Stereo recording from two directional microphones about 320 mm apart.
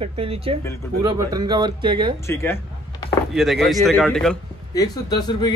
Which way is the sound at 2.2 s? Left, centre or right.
Centre.